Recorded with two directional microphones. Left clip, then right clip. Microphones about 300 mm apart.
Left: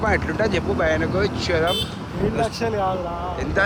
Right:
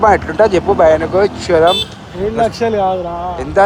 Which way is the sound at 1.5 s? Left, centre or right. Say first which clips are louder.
Right 11 dB; right.